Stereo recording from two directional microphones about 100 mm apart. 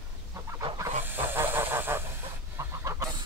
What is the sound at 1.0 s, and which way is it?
Hiss, 20° right (ahead or behind).